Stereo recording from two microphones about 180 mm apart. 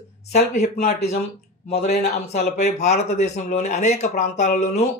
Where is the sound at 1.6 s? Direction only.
35° left (ahead or behind).